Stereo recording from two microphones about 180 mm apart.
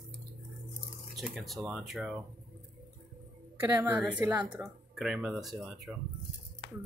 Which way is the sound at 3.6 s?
10° right (ahead or behind).